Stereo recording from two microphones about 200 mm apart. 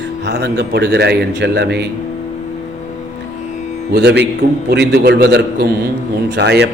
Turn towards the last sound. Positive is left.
turn(degrees=-60)  # may be behind; listen again after turning